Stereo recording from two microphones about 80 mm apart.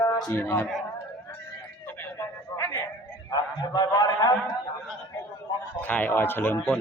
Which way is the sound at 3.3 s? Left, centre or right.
Left.